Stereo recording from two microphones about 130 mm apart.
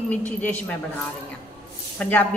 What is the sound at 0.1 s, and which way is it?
Speech, 10° left (ahead or behind).